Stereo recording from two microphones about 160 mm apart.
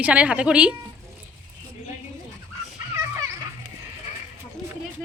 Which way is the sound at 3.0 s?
20° right (ahead or behind).